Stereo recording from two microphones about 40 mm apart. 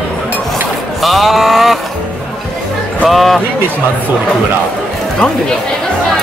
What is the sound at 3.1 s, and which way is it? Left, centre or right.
Speech, centre.